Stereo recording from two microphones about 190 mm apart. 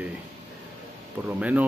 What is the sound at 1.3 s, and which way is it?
Speech, 10° right (ahead or behind).